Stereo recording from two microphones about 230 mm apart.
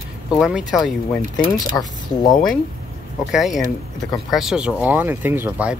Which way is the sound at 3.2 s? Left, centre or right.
Centre.